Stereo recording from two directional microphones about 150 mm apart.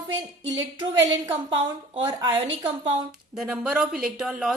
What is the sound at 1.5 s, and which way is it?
Speech, 30° right (ahead or behind).